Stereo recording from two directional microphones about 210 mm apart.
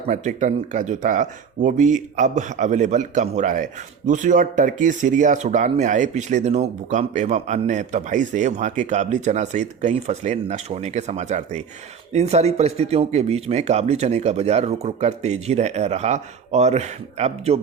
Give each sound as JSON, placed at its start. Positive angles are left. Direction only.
{"t": 0.1, "sound": "speech", "side_deg": -35}